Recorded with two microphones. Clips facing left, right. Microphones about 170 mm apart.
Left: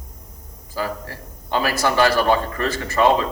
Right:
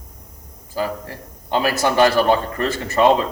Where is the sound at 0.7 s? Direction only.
20° right (ahead or behind).